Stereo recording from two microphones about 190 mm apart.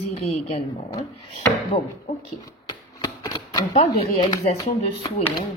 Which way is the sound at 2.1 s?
35° left (ahead or behind).